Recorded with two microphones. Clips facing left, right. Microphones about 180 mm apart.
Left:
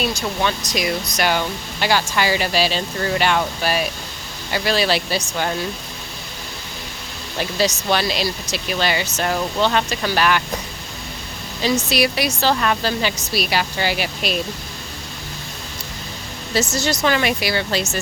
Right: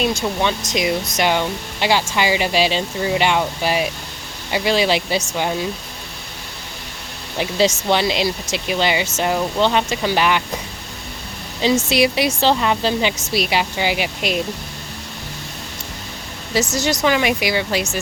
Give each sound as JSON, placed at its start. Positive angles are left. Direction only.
{"t": 0.2, "sound": "speech", "side_deg": -25}
{"t": 7.9, "sound": "speech", "side_deg": -20}
{"t": 11.9, "sound": "speech", "side_deg": -20}
{"t": 16.6, "sound": "speech", "side_deg": -15}